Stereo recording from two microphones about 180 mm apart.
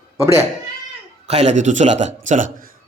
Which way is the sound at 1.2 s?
35° right (ahead or behind).